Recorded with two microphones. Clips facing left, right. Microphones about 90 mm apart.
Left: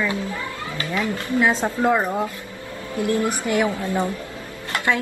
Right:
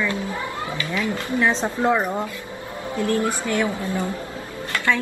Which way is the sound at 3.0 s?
20° left (ahead or behind).